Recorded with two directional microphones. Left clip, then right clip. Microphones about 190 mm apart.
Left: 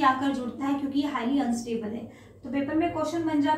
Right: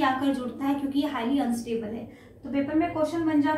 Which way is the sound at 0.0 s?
10° right (ahead or behind).